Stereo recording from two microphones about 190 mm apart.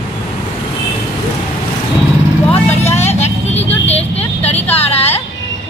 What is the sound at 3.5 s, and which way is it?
Speech, 10° left (ahead or behind).